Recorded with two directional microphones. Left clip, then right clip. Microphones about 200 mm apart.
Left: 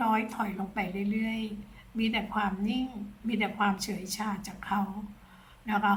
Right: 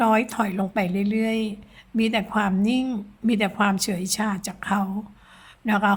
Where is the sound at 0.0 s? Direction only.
50° right (ahead or behind).